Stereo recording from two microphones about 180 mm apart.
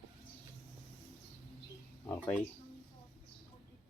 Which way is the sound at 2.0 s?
15° left (ahead or behind).